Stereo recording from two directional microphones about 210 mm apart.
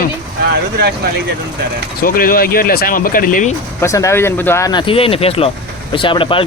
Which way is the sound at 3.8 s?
15° left (ahead or behind).